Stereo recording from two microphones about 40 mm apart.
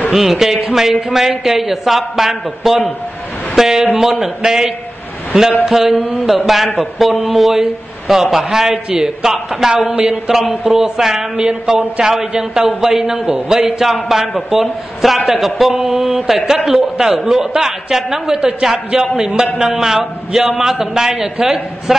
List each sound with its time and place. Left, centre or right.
0.1 s a man's voice: centre